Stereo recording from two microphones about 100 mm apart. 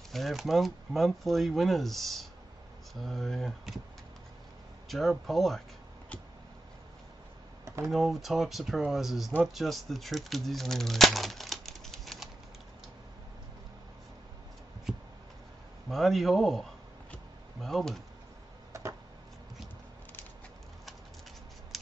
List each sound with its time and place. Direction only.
0.1 s speech: centre (ahead or behind)
4.8 s speech: centre (ahead or behind)
7.6 s computer keyboard: 30° right (ahead or behind)
7.9 s speech: centre (ahead or behind)
15.9 s speech: centre (ahead or behind)
17.1 s a sound: 5° left (ahead or behind)
18.7 s a sound: 30° right (ahead or behind)